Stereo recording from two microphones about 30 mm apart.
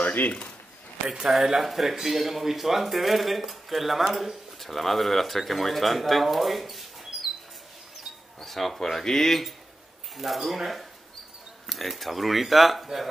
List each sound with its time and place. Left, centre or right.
0.0 s a sound: left
1.0 s speech: right
1.6 s speech: centre
8.4 s speech: centre
10.1 s speech: centre